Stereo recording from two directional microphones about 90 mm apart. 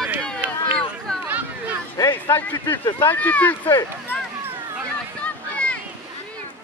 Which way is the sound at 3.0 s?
20° left (ahead or behind).